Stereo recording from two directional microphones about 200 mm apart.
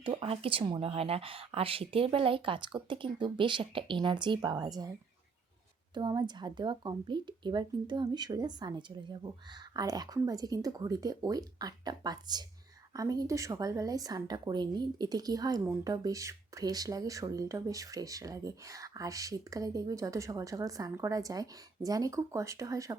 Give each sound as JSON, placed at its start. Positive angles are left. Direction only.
{"t": 0.0, "sound": "a woman's voice", "side_deg": -25}